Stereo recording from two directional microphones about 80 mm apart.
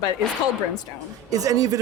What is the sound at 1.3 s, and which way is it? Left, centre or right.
Speech, right.